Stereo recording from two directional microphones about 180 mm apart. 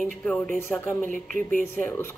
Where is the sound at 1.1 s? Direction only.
45° right (ahead or behind).